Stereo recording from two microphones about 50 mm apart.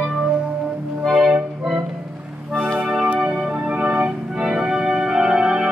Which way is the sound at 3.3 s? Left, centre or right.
Right.